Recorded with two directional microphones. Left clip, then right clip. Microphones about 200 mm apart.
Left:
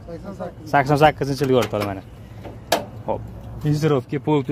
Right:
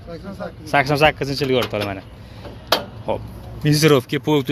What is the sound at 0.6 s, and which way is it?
Speech, 15° left (ahead or behind).